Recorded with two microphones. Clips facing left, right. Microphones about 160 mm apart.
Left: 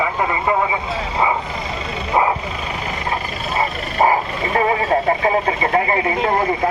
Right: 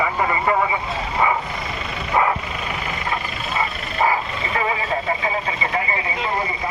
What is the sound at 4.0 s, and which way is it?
Speech, 40° left (ahead or behind).